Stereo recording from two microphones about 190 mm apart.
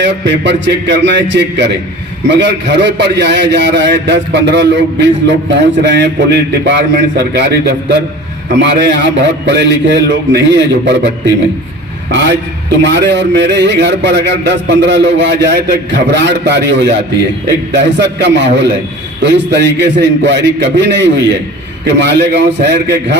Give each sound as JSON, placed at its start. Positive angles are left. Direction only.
{"t": 0.0, "sound": "a man's voice", "side_deg": -65}
{"t": 12.8, "sound": "a man's voice", "side_deg": -65}